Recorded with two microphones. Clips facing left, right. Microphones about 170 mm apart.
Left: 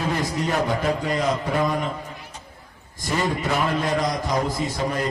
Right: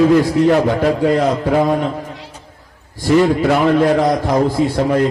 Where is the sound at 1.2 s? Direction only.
65° right (ahead or behind).